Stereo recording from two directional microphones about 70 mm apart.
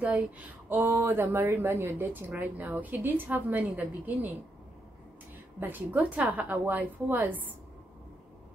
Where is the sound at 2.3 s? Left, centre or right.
Right.